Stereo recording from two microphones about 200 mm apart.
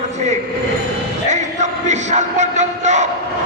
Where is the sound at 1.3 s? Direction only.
35° right (ahead or behind).